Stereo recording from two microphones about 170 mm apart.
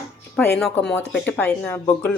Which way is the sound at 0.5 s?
Centre (ahead or behind).